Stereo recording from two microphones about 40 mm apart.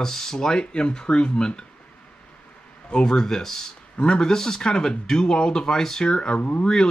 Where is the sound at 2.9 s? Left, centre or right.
Left.